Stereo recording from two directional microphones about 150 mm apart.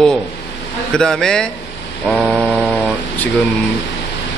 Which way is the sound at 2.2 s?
5° right (ahead or behind).